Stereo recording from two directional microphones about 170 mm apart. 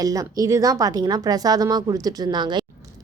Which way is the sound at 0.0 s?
20° right (ahead or behind).